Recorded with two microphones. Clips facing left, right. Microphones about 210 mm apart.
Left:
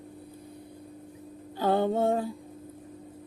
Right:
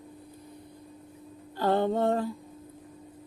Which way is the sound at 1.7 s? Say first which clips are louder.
Even; 10° left (ahead or behind).